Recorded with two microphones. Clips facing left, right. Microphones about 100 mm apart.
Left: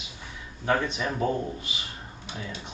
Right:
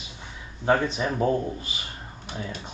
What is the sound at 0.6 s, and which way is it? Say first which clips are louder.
Speech: right 3 dB; 25° right (ahead or behind).